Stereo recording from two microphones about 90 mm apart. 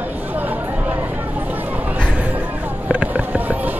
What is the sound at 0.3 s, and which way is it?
Chatter, 20° right (ahead or behind).